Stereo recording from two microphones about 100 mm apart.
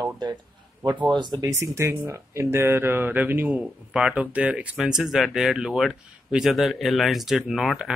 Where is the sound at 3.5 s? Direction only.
5° right (ahead or behind).